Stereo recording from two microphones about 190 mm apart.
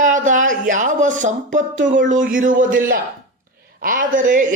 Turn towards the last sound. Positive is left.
turn(degrees=-45)  # may be behind; listen again after turning